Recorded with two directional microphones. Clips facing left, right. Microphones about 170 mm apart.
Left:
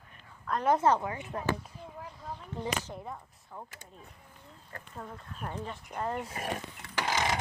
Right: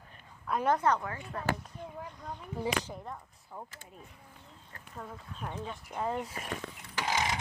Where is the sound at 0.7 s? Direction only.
25° left (ahead or behind).